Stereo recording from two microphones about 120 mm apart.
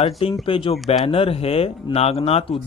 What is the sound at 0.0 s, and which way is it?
Speech, 50° left (ahead or behind).